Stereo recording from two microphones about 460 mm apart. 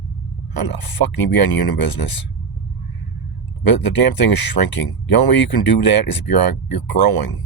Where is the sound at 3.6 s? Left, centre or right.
Left.